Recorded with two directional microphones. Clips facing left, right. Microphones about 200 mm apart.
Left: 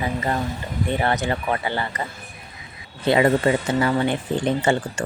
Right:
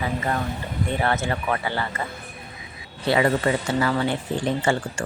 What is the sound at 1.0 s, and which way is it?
A woman's voice, 20° left (ahead or behind).